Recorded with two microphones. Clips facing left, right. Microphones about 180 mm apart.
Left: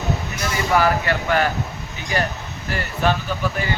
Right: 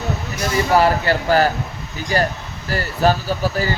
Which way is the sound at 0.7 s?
30° right (ahead or behind).